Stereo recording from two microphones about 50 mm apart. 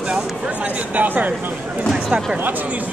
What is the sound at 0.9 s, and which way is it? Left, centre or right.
Speech, right.